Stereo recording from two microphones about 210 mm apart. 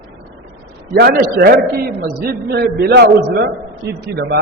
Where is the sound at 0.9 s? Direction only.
50° right (ahead or behind).